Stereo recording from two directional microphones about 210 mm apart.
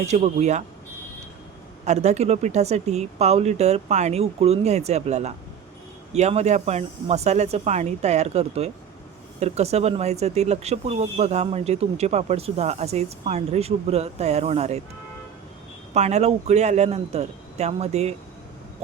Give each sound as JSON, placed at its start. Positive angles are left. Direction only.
{"t": 0.0, "sound": "speech", "side_deg": -30}
{"t": 1.8, "sound": "speech", "side_deg": -30}
{"t": 16.0, "sound": "speech", "side_deg": -30}